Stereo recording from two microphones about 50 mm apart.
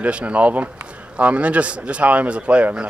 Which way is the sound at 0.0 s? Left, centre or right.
Right.